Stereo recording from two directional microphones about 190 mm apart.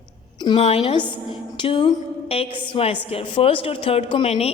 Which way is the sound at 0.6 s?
30° left (ahead or behind).